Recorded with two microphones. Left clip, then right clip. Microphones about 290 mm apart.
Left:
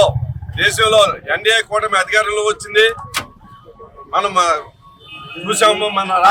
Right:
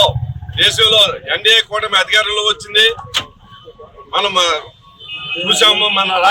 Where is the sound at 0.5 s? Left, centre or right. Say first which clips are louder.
Right 1 dB; centre.